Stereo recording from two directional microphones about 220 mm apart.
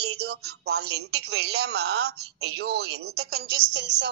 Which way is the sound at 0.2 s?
45° right (ahead or behind).